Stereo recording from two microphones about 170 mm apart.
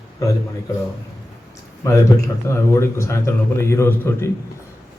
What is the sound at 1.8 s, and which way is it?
A man's voice, 15° left (ahead or behind).